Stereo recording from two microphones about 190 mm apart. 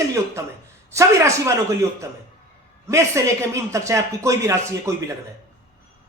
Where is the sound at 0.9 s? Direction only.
15° right (ahead or behind).